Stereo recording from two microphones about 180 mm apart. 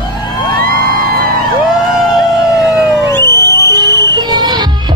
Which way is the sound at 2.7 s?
15° left (ahead or behind).